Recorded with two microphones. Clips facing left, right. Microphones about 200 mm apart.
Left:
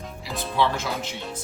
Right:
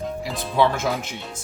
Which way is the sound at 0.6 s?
50° right (ahead or behind).